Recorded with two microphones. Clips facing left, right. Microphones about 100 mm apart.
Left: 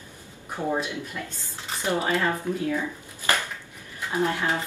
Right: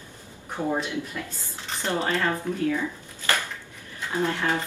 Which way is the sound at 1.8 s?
15° left (ahead or behind).